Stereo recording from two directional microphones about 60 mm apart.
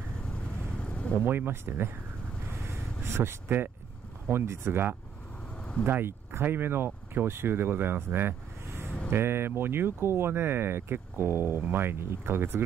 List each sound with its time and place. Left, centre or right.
0.3 s vehicle: centre
1.2 s speech: right
3.0 s speech: right
5.9 s speech: right